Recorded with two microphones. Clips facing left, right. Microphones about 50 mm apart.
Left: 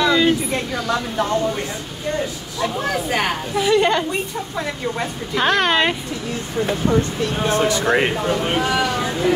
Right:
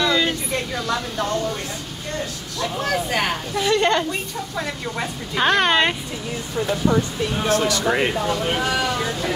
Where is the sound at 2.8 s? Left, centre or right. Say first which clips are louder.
Right 1 dB; centre.